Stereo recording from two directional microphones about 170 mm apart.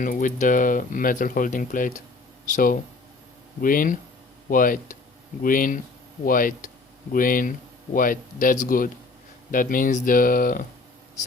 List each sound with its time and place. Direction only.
0.0 s speech: 50° left (ahead or behind)